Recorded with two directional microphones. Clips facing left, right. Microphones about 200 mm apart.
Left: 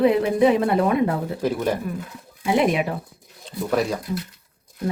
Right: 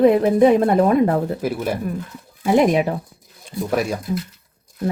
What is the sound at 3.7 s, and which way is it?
Speech, 10° right (ahead or behind).